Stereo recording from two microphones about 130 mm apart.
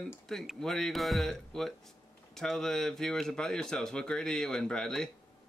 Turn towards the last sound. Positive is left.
turn(degrees=5)  # may be behind; listen again after turning